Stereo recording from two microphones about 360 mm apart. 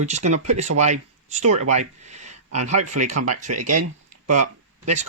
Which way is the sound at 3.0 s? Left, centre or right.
Centre.